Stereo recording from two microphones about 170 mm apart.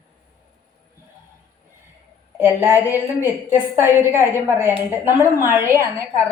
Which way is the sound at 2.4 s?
10° right (ahead or behind).